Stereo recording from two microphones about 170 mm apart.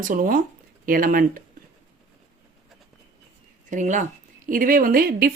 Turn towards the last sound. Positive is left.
turn(degrees=-60)  # may be behind; listen again after turning